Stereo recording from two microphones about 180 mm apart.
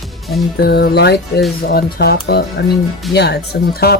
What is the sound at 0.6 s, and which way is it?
Speech, 65° left (ahead or behind).